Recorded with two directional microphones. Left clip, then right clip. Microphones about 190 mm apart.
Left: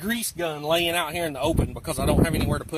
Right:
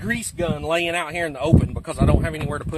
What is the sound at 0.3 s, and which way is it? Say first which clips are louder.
Speech: right 1 dB; 15° right (ahead or behind).